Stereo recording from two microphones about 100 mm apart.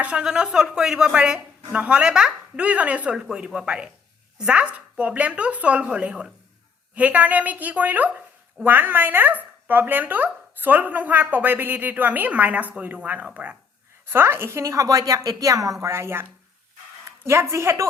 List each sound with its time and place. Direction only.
0.0 s a woman's voice: 10° right (ahead or behind)
17.2 s a woman's voice: 25° right (ahead or behind)